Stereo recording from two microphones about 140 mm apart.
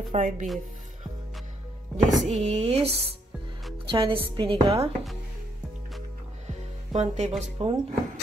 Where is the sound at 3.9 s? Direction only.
35° right (ahead or behind).